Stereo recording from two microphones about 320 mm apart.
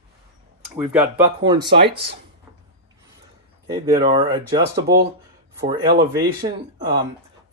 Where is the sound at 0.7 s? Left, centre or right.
Centre.